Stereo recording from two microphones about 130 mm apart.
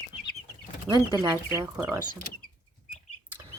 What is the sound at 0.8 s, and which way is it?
Speech, 30° right (ahead or behind).